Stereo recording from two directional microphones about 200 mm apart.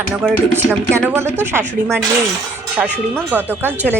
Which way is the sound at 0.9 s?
15° right (ahead or behind).